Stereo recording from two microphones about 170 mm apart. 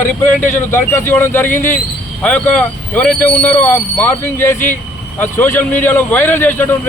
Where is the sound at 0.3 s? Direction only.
50° left (ahead or behind).